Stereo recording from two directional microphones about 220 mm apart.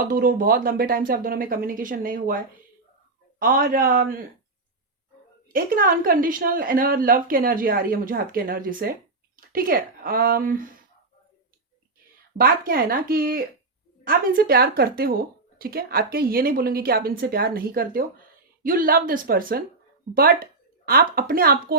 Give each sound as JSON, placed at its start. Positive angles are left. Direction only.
{"t": 0.0, "sound": "speech", "side_deg": -40}
{"t": 5.5, "sound": "speech", "side_deg": -40}
{"t": 12.4, "sound": "speech", "side_deg": -40}